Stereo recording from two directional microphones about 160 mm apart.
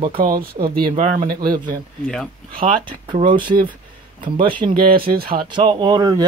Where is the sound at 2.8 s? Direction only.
30° right (ahead or behind).